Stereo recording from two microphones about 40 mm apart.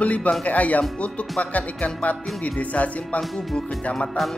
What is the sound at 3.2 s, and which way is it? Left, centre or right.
Speech, centre.